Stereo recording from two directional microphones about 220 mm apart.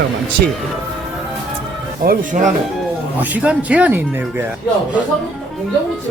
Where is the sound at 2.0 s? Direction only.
35° right (ahead or behind).